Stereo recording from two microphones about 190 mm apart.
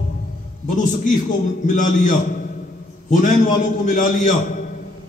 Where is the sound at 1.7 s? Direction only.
40° left (ahead or behind).